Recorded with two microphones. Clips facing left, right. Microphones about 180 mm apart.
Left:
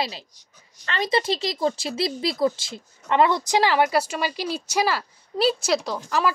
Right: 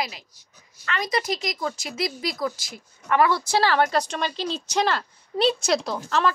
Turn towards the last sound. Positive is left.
turn(degrees=0)  # may be behind; listen again after turning